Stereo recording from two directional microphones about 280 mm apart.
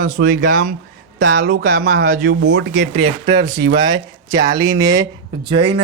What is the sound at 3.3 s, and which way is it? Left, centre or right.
Speech, centre.